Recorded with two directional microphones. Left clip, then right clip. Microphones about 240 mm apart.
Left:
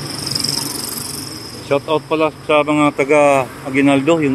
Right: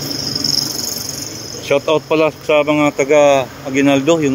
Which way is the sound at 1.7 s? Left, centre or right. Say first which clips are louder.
Right 2 dB; right.